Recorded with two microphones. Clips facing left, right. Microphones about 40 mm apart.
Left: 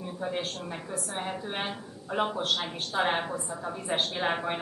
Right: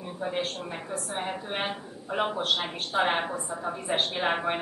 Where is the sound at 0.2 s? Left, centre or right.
Centre.